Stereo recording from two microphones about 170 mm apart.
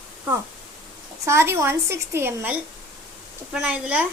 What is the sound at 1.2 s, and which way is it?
A woman's voice, 15° right (ahead or behind).